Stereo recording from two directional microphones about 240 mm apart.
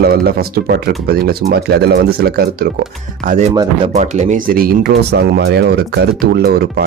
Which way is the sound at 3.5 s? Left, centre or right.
Right.